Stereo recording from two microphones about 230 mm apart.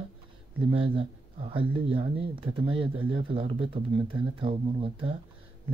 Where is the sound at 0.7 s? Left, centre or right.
Right.